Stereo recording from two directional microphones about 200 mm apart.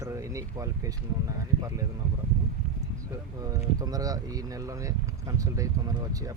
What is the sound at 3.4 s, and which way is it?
Speech, 20° right (ahead or behind).